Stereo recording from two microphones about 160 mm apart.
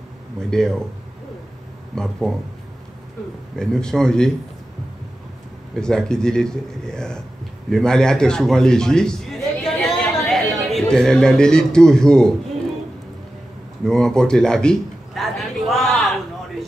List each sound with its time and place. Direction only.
0.4 s a man's voice: 5° left (ahead or behind)
2.0 s a man's voice: centre (ahead or behind)
3.5 s a man's voice: 5° left (ahead or behind)
5.8 s a man's voice: 5° left (ahead or behind)
13.8 s a sound: 5° left (ahead or behind)